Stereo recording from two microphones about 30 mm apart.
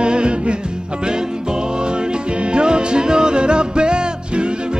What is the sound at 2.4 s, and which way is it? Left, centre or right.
Music, right.